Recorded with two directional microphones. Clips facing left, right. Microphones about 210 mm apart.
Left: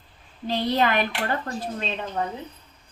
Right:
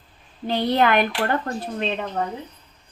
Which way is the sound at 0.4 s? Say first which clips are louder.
Right 3 dB; 55° right (ahead or behind).